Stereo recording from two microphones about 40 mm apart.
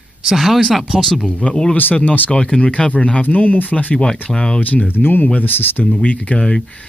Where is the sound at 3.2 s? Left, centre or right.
Left.